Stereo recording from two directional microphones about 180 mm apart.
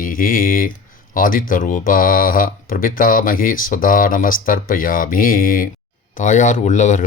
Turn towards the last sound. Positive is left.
turn(degrees=40)  # may be behind; listen again after turning